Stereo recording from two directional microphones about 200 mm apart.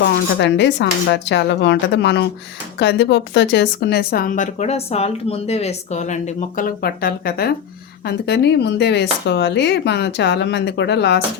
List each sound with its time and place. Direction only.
0.0 s a woman's voice: 60° left (ahead or behind)